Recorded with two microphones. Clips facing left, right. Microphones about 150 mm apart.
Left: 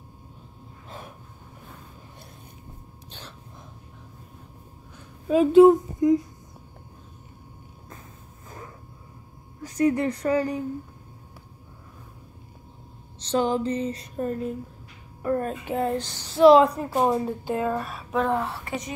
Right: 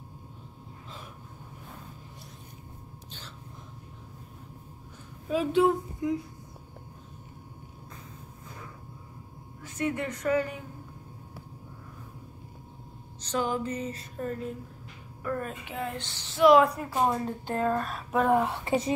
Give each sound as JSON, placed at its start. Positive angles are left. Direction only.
{"t": 0.8, "sound": "gasp", "side_deg": 55}
{"t": 5.3, "sound": "speech", "side_deg": 45}
{"t": 9.6, "sound": "speech", "side_deg": 35}
{"t": 13.2, "sound": "speech", "side_deg": 30}
{"t": 17.5, "sound": "a woman's voice", "side_deg": 5}